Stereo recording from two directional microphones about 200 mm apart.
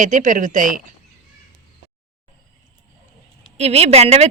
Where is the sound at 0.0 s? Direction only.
40° right (ahead or behind).